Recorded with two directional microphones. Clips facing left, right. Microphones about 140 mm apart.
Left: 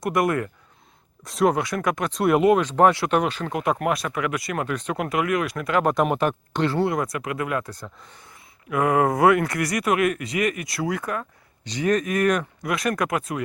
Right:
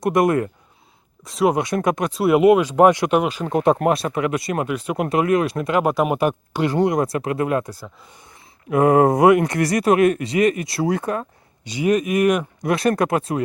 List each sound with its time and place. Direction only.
0.0 s speech: 25° right (ahead or behind)
1.2 s speech: centre (ahead or behind)
1.5 s speech: 25° right (ahead or behind)
2.0 s speech: 5° right (ahead or behind)
3.5 s speech: 30° right (ahead or behind)
4.7 s speech: 10° right (ahead or behind)
4.9 s speech: 30° right (ahead or behind)
5.8 s speech: 5° right (ahead or behind)
7.0 s speech: 30° right (ahead or behind)
7.6 s speech: 10° right (ahead or behind)
8.7 s speech: 30° right (ahead or behind)
9.6 s speech: 30° right (ahead or behind)
11.6 s speech: 10° right (ahead or behind)
12.6 s speech: 30° right (ahead or behind)